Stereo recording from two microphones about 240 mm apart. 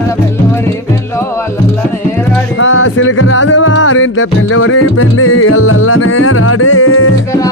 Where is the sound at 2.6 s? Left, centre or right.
Left.